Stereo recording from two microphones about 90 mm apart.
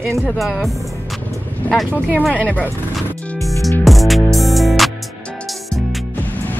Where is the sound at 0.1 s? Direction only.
Centre (ahead or behind).